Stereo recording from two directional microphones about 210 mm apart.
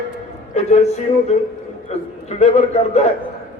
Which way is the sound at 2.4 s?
30° left (ahead or behind).